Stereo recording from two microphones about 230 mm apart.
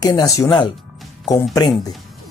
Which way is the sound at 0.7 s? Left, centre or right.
Centre.